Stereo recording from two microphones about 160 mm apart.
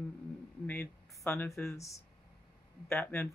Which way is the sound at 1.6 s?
20° left (ahead or behind).